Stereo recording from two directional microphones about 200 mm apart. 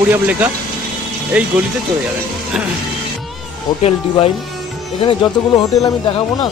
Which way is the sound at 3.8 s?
30° left (ahead or behind).